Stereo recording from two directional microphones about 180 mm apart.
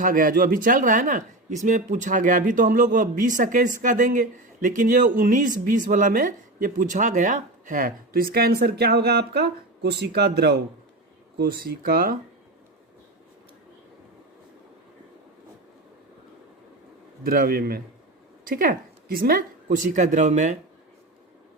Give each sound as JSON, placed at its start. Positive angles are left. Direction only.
{"t": 0.0, "sound": "speech", "side_deg": -50}
{"t": 17.2, "sound": "a woman's voice", "side_deg": -55}
{"t": 19.6, "sound": "speech", "side_deg": -45}